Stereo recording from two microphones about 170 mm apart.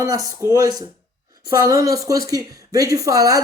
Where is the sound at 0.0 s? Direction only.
20° right (ahead or behind).